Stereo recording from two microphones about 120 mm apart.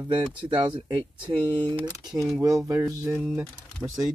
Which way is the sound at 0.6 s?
40° right (ahead or behind).